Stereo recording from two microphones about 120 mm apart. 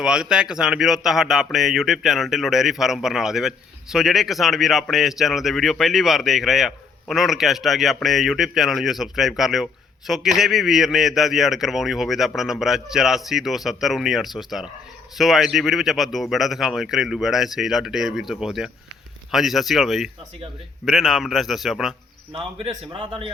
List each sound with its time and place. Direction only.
0.0 s speech: 5° right (ahead or behind)
22.3 s a man's voice: 50° right (ahead or behind)